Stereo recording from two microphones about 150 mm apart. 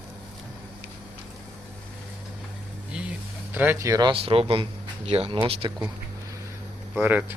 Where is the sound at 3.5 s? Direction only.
15° right (ahead or behind).